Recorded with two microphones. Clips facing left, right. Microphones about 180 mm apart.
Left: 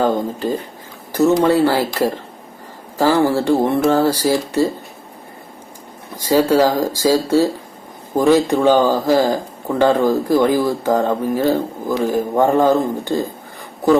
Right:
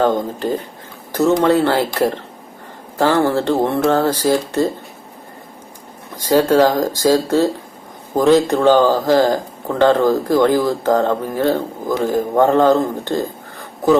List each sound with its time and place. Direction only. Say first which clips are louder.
0.0 s speech: right 1 dB; 10° left (ahead or behind)
3.0 s speech: even; 10° left (ahead or behind)
6.2 s speech: right 1 dB; 10° left (ahead or behind)